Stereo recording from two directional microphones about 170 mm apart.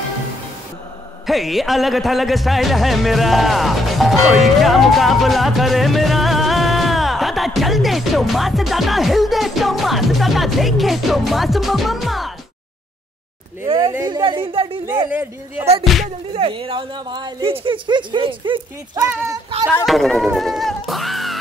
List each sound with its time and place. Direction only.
1.2 s music: centre (ahead or behind)
13.7 s speech: 30° right (ahead or behind)
13.9 s a sound: 25° right (ahead or behind)
15.0 s a man's voice: 10° right (ahead or behind)
15.8 s music: centre (ahead or behind)
16.3 s speech: 30° right (ahead or behind)
19.9 s music: centre (ahead or behind)